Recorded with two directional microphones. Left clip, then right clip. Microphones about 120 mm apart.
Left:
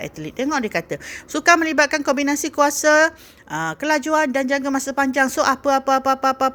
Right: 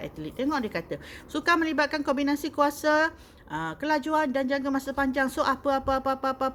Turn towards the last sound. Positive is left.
turn(degrees=60)  # may be behind; listen again after turning